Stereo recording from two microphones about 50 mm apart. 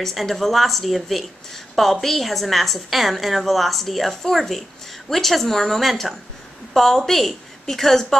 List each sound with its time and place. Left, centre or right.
0.0 s a woman's voice: centre